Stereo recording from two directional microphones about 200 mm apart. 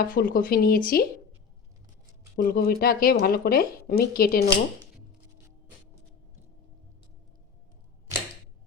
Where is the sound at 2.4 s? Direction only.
45° left (ahead or behind).